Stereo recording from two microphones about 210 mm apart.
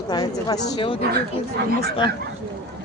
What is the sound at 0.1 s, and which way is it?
Speech, 20° left (ahead or behind).